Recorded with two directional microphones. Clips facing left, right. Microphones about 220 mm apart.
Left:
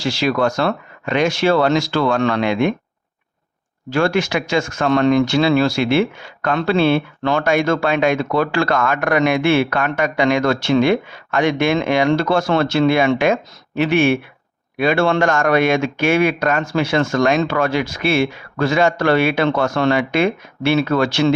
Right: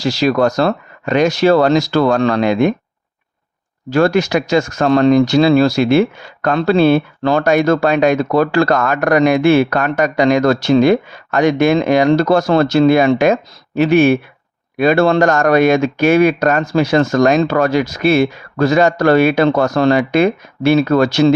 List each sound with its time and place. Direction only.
0.0 s speech: 40° right (ahead or behind)
3.8 s speech: 40° right (ahead or behind)